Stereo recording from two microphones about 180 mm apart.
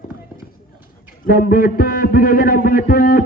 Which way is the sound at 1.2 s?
50° left (ahead or behind).